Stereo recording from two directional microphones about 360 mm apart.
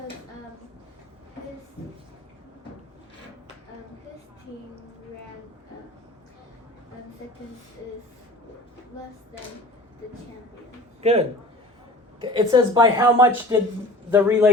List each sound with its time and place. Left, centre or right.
11.0 s a man's voice: centre